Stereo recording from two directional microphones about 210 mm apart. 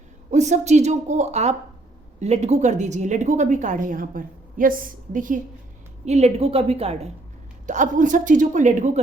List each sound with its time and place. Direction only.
0.3 s a woman's voice: 35° right (ahead or behind)